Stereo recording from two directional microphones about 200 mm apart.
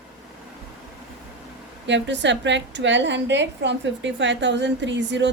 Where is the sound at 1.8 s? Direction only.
65° right (ahead or behind).